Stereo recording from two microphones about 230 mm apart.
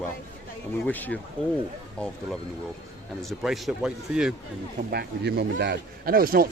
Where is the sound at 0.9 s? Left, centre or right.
Centre.